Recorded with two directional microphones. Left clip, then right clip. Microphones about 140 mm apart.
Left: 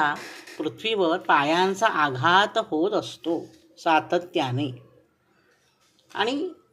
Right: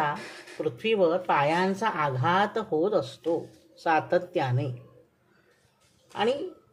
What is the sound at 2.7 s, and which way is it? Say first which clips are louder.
Speech: left 1 dB; 15° left (ahead or behind).